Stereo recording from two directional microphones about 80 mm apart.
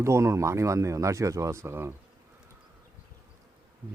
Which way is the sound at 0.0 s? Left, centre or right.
Right.